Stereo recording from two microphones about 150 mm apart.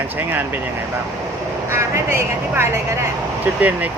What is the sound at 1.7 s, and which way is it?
Speech, 15° right (ahead or behind).